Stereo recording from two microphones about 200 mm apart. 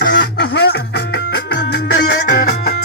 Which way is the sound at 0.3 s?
55° left (ahead or behind).